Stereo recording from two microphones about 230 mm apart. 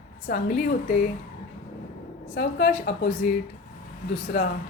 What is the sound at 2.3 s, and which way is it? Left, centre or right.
Speech, left.